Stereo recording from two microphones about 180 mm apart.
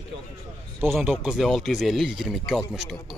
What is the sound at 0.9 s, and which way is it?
Speech, centre (ahead or behind).